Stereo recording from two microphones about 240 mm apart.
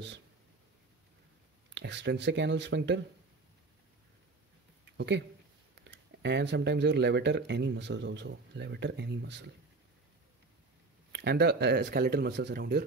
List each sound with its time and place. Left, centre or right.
1.7 s speech: right
4.9 s speech: right
11.1 s speech: right